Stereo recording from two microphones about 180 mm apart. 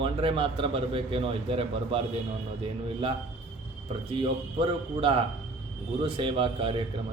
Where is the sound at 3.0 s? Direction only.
30° right (ahead or behind).